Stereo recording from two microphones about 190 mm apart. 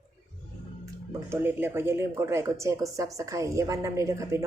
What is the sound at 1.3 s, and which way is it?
Speech, 10° right (ahead or behind).